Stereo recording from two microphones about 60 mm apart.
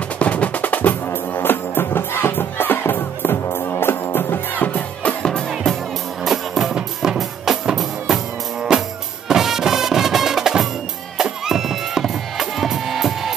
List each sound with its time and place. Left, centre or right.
0.2 s music: left
6.2 s music: centre